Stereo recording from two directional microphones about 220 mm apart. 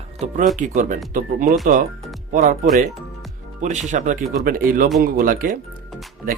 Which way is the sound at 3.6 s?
35° right (ahead or behind).